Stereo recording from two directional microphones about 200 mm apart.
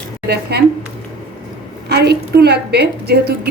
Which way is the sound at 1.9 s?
55° right (ahead or behind).